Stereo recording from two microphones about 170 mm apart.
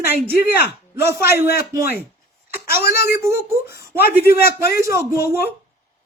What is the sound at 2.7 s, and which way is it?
Speech, 65° left (ahead or behind).